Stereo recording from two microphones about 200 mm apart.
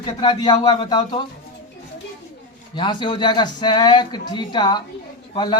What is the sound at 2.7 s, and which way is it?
Speech, 25° left (ahead or behind).